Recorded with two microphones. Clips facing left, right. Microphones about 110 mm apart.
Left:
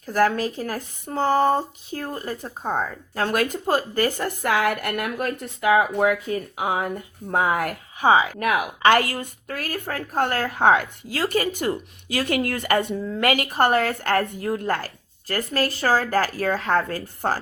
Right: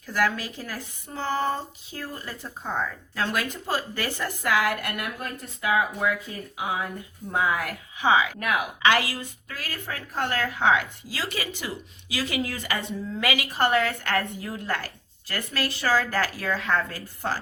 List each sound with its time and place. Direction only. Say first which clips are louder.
0.0 s speech: left 6 dB; 45° left (ahead or behind)
4.9 s speech: left 7 dB; 70° left (ahead or behind); by 13.7 s 50° left (ahead or behind)
13.7 s speech: left 3 dB; 35° left (ahead or behind)
14.3 s speech: left 8 dB; 50° left (ahead or behind)
15.3 s speech: left 6 dB; 40° left (ahead or behind)
16.9 s speech: left 5 dB; 50° left (ahead or behind)